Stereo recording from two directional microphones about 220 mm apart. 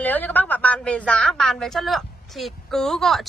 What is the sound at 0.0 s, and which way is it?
A woman's voice, 10° left (ahead or behind).